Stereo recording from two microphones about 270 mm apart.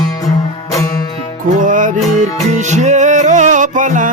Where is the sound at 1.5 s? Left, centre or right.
Right.